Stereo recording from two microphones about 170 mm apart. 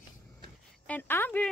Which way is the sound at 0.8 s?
10° left (ahead or behind).